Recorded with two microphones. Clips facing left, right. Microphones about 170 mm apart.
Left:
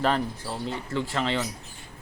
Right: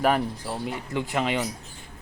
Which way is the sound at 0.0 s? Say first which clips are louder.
Right 2 dB; 10° right (ahead or behind).